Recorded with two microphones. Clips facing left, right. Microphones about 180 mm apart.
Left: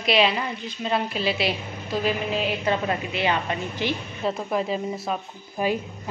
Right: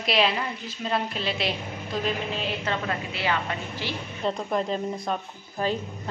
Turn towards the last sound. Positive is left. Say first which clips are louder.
# left 2 dB
turn(degrees=10)  # may be behind; listen again after turning